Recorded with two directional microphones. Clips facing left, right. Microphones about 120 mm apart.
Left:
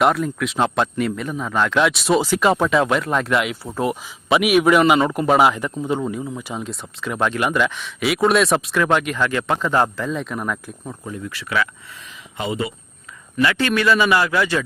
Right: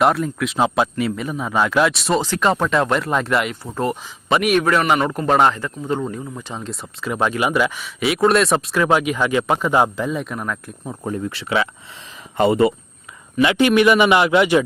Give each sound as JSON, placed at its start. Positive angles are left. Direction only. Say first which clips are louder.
{"t": 0.0, "sound": "a man's voice", "louder": "right 1 dB", "side_deg": 0}
{"t": 5.5, "sound": "a man's voice", "louder": "left 1 dB", "side_deg": 15}
{"t": 10.1, "sound": "a man's voice", "louder": "even", "side_deg": 0}
{"t": 11.0, "sound": "speech", "louder": "right 7 dB", "side_deg": -45}
{"t": 11.3, "sound": "a man's voice", "louder": "even", "side_deg": -30}
{"t": 12.4, "sound": "speech", "louder": "right 10 dB", "side_deg": -55}
{"t": 13.4, "sound": "a man's voice", "louder": "right 4 dB", "side_deg": -20}